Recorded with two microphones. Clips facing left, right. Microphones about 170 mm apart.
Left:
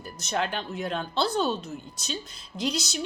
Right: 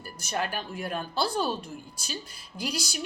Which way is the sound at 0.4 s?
10° right (ahead or behind).